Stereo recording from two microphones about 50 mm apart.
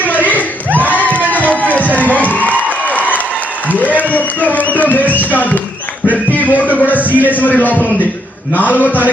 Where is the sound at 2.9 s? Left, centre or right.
Left.